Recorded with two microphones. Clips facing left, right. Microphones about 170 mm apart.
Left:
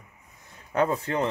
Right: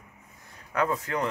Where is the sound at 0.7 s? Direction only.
30° left (ahead or behind).